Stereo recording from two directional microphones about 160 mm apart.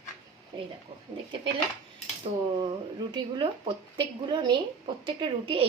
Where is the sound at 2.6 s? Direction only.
30° right (ahead or behind).